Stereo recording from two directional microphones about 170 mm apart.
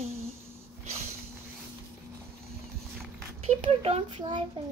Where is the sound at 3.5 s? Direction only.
35° right (ahead or behind).